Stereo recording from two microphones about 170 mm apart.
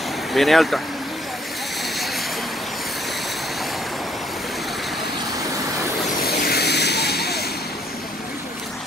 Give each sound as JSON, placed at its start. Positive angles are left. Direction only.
{"t": 0.3, "sound": "speech", "side_deg": 0}
{"t": 6.2, "sound": "vehicle", "side_deg": 65}